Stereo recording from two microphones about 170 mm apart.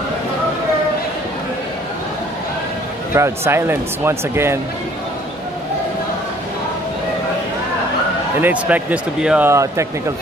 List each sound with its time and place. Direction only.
3.2 s speech: 15° right (ahead or behind)
8.4 s speech: 10° right (ahead or behind)
9.5 s speech: 15° right (ahead or behind)